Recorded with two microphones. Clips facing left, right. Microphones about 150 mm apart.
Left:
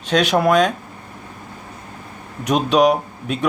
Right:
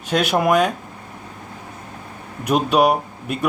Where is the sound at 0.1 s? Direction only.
10° right (ahead or behind).